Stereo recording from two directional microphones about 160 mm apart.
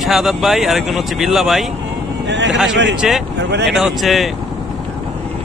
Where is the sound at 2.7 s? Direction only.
90° right.